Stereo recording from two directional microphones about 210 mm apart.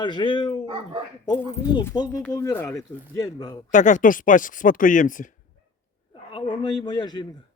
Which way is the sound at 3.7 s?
35° left (ahead or behind).